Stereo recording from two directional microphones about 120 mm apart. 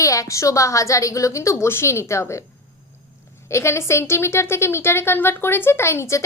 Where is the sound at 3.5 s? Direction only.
20° left (ahead or behind).